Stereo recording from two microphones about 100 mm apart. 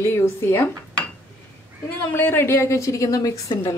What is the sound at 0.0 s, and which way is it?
Speech, 25° left (ahead or behind).